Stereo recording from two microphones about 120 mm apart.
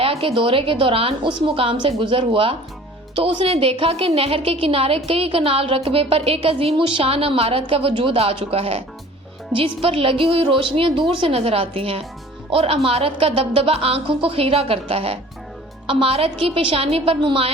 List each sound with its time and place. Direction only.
0.0 s a woman's voice: 50° right (ahead or behind)